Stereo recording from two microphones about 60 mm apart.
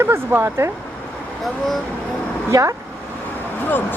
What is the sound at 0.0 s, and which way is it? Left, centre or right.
Speech, right.